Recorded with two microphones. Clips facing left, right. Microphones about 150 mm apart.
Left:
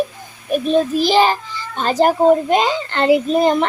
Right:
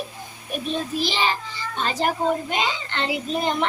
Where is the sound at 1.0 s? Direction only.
45° left (ahead or behind).